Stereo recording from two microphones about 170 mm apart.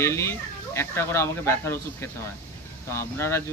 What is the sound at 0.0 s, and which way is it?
Speech, 15° left (ahead or behind).